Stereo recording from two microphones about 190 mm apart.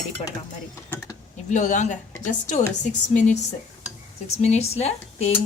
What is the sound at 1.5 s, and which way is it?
Speech, 40° left (ahead or behind).